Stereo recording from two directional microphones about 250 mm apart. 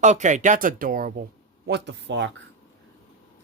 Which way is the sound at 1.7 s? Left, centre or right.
Right.